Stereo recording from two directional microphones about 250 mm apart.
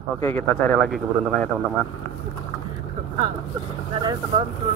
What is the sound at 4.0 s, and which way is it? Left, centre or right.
Speech, centre.